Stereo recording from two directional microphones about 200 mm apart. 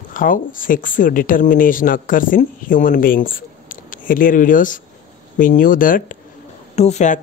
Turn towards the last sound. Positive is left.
turn(degrees=35)  # may be behind; listen again after turning